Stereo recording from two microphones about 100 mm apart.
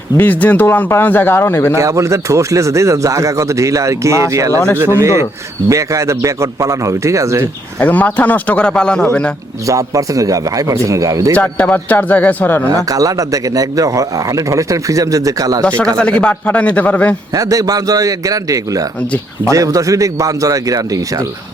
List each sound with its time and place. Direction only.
0.2 s speech: 15° left (ahead or behind)
1.7 s a man's voice: 30° right (ahead or behind)
7.8 s speech: 15° left (ahead or behind)
9.6 s speech: 35° right (ahead or behind)
11.3 s speech: 15° left (ahead or behind)
12.7 s speech: 35° right (ahead or behind)
16.0 s speech: 10° left (ahead or behind)
17.3 s speech: 35° right (ahead or behind)